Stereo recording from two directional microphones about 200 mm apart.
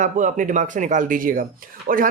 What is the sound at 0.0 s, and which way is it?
Speech, 40° right (ahead or behind).